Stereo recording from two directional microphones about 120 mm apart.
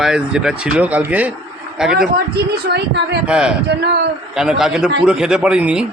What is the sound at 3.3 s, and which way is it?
A man's voice, 5° right (ahead or behind).